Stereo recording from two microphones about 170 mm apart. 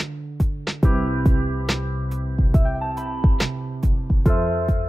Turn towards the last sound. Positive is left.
turn(degrees=0)  # may be behind; listen again after turning